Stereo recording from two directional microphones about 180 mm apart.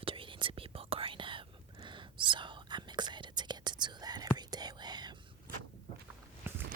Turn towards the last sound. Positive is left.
turn(degrees=-15)  # may be behind; listen again after turning